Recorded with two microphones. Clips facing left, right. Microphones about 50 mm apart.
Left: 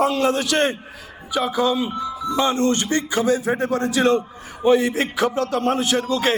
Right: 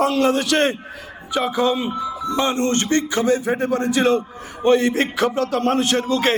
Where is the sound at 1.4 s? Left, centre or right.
Right.